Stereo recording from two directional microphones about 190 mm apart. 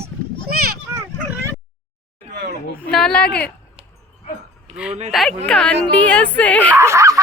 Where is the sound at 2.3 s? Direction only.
60° right (ahead or behind).